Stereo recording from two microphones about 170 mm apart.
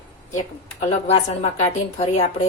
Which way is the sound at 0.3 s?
45° left (ahead or behind).